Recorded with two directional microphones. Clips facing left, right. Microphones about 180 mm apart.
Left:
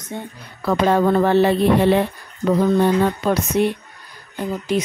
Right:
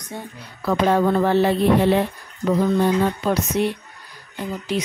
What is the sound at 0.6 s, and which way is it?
Speech, 65° left (ahead or behind).